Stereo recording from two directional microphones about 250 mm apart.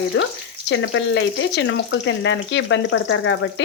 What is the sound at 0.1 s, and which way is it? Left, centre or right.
Speech, left.